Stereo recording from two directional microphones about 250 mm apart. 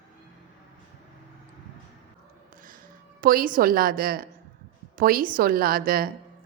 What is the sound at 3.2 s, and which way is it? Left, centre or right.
A woman's voice, right.